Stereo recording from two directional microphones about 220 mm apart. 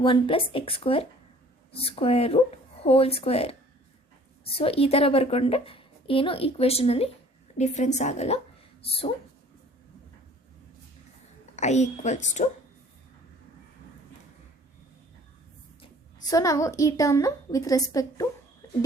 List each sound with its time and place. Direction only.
0.0 s a woman's voice: 25° left (ahead or behind)
11.5 s a woman's voice: 30° left (ahead or behind)
16.3 s a woman's voice: 15° left (ahead or behind)
18.6 s a sound: 15° left (ahead or behind)